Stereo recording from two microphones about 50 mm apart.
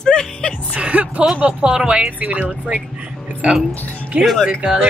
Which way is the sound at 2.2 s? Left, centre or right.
Right.